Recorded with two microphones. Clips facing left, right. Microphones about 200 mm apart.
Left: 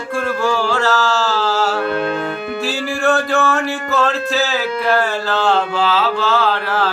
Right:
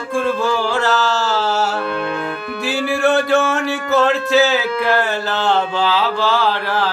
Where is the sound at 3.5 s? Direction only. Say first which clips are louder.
Right 1 dB; 20° right (ahead or behind).